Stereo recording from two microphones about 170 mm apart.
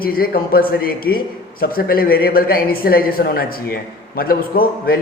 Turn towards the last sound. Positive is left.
turn(degrees=60)  # may be behind; listen again after turning